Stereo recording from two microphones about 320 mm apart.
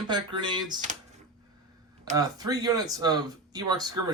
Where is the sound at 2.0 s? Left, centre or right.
Centre.